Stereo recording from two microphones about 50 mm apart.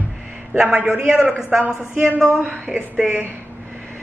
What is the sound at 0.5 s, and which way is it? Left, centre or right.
A woman's voice, centre.